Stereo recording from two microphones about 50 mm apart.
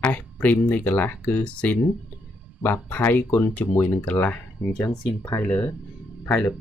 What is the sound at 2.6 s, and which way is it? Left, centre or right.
Speech, left.